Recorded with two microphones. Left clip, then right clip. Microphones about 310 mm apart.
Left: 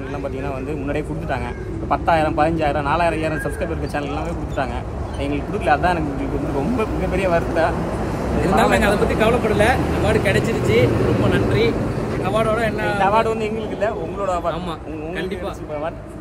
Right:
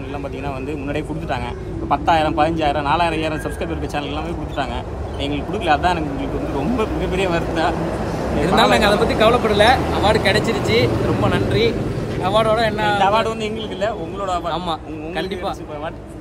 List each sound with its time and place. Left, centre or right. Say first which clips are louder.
1.9 s speech: right 1 dB; centre
5.2 s speech: even; centre
8.5 s speech: right 2 dB; right; by 14.5 s centre